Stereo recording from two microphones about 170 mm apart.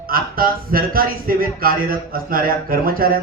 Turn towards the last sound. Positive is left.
turn(degrees=-60)  # may be behind; listen again after turning